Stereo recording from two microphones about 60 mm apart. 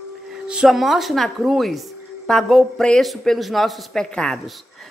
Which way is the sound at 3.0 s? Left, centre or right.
Centre.